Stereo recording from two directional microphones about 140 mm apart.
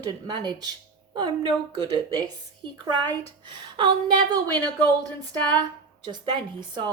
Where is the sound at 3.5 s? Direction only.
35° right (ahead or behind).